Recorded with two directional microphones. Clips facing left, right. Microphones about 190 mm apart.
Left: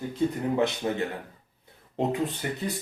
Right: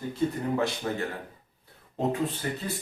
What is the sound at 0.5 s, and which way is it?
A man's voice, 20° left (ahead or behind).